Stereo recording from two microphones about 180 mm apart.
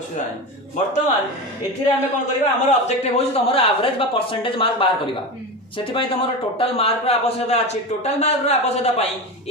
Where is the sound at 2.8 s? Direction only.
35° left (ahead or behind).